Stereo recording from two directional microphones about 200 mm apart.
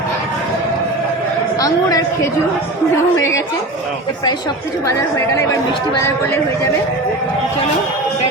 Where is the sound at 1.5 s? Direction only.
20° left (ahead or behind).